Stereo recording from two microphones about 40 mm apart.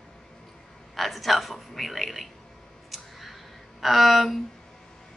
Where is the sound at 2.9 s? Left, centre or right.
Centre.